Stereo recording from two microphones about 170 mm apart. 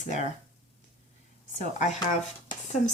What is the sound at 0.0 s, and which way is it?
Speech, 45° left (ahead or behind).